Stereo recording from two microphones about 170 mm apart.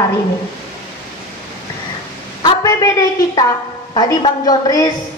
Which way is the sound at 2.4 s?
20° left (ahead or behind).